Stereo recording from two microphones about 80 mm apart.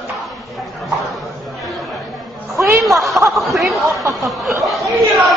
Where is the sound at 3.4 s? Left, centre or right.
Centre.